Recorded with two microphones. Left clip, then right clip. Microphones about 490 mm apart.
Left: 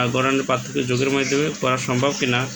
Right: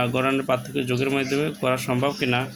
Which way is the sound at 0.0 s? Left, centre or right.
Right.